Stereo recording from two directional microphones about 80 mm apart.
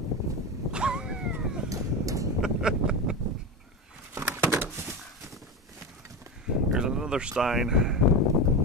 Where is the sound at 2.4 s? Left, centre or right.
Centre.